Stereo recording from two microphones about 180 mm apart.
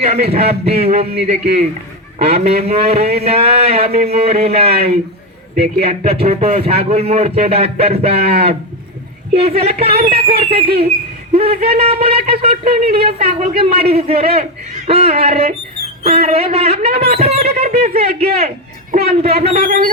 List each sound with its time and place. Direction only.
0.3 s speech: 35° right (ahead or behind)
2.1 s speech: 35° right (ahead or behind)
11.3 s a sound: 35° right (ahead or behind)
11.7 s speech: 35° right (ahead or behind)
18.3 s a sound: 35° right (ahead or behind)
19.0 s speech: 35° right (ahead or behind)
19.6 s music: 50° right (ahead or behind)